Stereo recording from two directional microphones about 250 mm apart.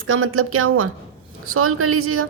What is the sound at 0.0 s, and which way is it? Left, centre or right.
A woman's voice, right.